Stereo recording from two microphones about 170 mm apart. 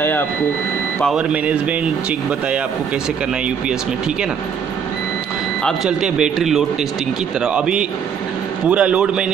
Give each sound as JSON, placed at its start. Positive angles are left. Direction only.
{"t": 1.0, "sound": "speech", "side_deg": -5}
{"t": 5.9, "sound": "speech", "side_deg": -5}